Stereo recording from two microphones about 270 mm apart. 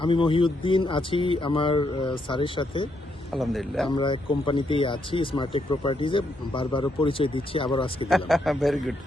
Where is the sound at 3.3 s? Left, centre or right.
Centre.